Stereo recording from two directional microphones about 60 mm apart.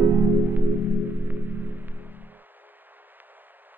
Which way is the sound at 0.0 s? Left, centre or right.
Right.